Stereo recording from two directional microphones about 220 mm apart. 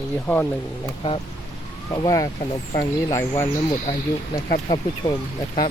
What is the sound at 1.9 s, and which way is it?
Speech, 15° left (ahead or behind).